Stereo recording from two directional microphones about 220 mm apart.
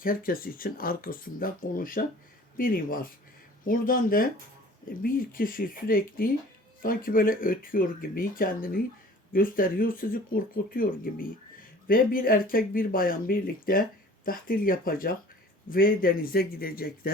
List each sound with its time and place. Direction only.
0.0 s speech: 40° left (ahead or behind)